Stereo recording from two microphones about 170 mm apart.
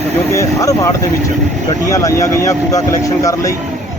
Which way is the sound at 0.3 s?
20° left (ahead or behind).